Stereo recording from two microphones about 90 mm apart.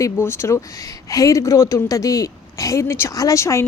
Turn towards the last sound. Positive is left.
turn(degrees=30)  # may be behind; listen again after turning